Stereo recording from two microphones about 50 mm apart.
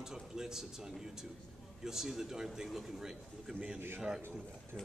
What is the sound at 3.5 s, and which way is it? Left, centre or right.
Speech, right.